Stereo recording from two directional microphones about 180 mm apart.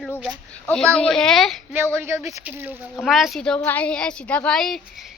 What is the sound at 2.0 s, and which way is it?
A child's voice, 15° right (ahead or behind).